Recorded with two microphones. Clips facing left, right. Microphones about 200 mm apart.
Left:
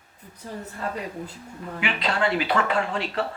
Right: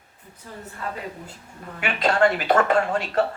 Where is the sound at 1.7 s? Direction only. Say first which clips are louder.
Right 5 dB; 45° right (ahead or behind).